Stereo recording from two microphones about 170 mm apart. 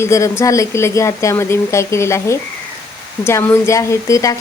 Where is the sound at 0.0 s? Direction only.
15° left (ahead or behind).